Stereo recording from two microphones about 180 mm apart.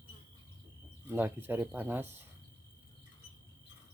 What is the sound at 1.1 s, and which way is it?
Speech, 10° right (ahead or behind).